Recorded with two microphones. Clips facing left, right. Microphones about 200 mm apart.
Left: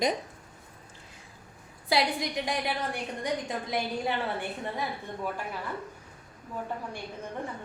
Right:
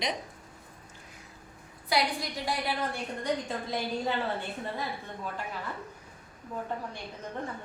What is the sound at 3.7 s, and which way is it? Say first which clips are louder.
Speech: left 1 dB; 15° left (ahead or behind).